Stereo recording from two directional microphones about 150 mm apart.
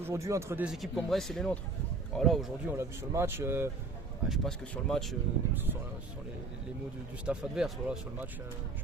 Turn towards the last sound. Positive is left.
turn(degrees=-5)  # may be behind; listen again after turning